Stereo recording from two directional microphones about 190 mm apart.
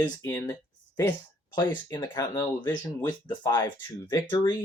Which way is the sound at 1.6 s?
15° left (ahead or behind).